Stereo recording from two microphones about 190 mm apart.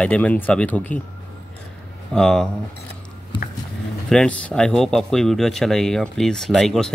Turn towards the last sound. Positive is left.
turn(degrees=0)  # may be behind; listen again after turning